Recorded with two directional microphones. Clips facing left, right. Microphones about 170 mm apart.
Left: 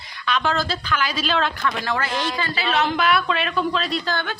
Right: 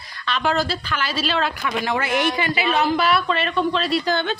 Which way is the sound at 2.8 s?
5° right (ahead or behind).